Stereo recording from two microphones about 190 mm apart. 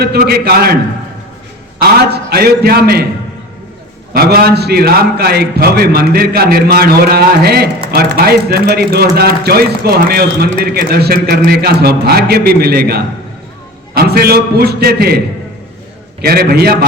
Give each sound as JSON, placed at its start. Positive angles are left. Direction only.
{"t": 0.0, "sound": "a man's voice", "side_deg": -55}
{"t": 1.8, "sound": "a man's voice", "side_deg": -55}
{"t": 4.1, "sound": "a man's voice", "side_deg": -55}
{"t": 16.2, "sound": "a man's voice", "side_deg": -55}